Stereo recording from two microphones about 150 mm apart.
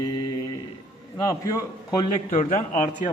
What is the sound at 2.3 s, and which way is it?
Speech, 60° left (ahead or behind).